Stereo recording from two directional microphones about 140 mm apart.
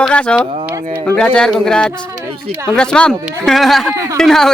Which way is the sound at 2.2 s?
15° right (ahead or behind).